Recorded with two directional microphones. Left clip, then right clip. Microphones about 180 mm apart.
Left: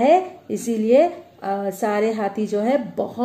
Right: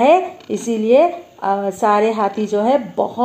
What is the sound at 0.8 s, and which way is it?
A woman's voice, 10° right (ahead or behind).